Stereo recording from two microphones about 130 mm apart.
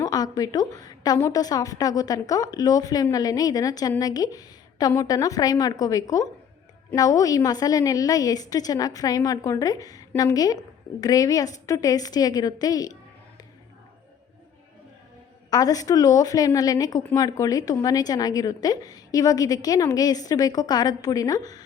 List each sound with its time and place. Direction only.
0.0 s a woman's voice: 30° left (ahead or behind)
15.4 s a woman's voice: 30° left (ahead or behind)